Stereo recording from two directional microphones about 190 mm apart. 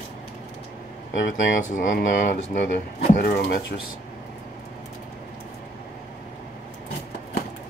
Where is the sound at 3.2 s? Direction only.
55° left (ahead or behind).